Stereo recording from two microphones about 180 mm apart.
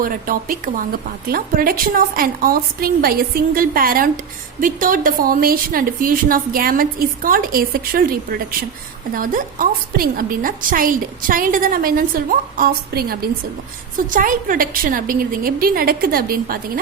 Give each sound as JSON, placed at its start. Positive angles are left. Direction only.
{"t": 0.0, "sound": "a woman's voice", "side_deg": -50}